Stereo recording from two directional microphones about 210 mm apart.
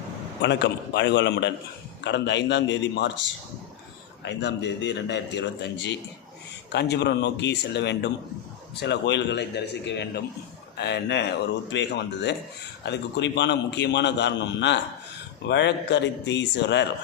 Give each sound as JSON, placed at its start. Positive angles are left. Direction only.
{"t": 0.4, "sound": "a man's voice", "side_deg": 55}
{"t": 4.2, "sound": "a man's voice", "side_deg": 55}